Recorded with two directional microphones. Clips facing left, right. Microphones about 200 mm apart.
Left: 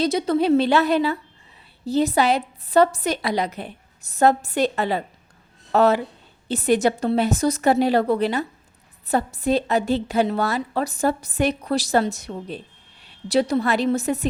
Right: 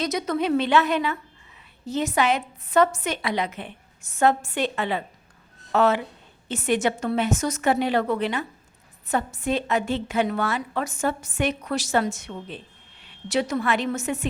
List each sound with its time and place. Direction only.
0.0 s a woman's voice: 30° left (ahead or behind)